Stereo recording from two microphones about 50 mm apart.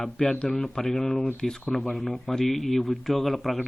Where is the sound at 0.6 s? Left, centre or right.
Centre.